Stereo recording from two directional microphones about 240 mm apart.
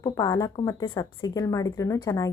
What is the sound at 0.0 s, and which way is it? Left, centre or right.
Speech, centre.